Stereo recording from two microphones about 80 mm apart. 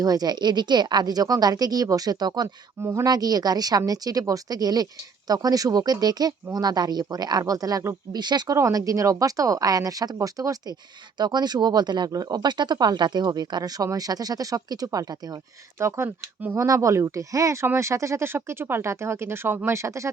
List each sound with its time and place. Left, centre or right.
0.0 s speech: right
8.1 s speech: right
8.5 s speech: right
11.2 s speech: right
15.8 s speech: right
16.0 s speech: right
16.6 s speech: right